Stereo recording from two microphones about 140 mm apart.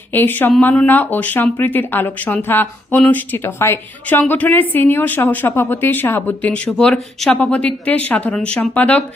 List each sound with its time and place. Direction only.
0.1 s a woman's voice: 15° left (ahead or behind)